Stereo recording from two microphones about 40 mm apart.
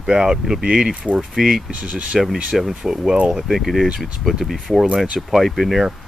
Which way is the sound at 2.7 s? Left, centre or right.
Centre.